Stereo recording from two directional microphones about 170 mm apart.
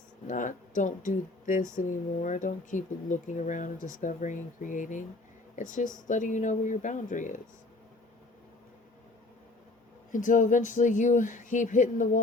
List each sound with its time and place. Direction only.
0.3 s speech: 50° left (ahead or behind)
10.1 s speech: 50° left (ahead or behind)